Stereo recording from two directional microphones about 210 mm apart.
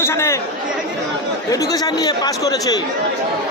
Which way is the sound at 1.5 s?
15° left (ahead or behind).